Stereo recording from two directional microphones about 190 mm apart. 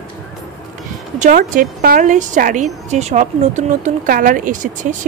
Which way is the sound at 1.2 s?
45° right (ahead or behind).